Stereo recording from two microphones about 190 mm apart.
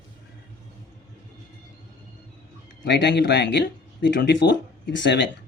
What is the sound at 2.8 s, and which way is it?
A man's voice, 65° left (ahead or behind).